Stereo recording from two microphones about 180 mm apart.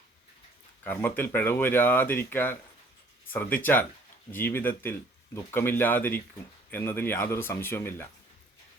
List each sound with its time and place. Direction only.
0.9 s speech: 10° left (ahead or behind)